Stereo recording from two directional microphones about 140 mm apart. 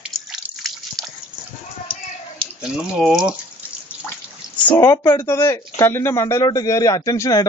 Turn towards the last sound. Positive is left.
turn(degrees=25)  # may be behind; listen again after turning